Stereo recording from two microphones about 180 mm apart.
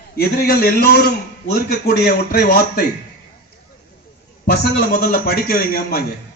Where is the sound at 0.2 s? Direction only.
55° left (ahead or behind).